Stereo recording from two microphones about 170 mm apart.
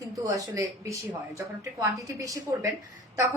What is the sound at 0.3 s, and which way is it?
A woman's voice, 20° right (ahead or behind).